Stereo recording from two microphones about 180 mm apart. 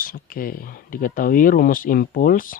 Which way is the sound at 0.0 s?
55° left (ahead or behind).